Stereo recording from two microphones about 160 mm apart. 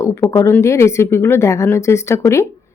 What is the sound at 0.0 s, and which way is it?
Speech, 20° left (ahead or behind).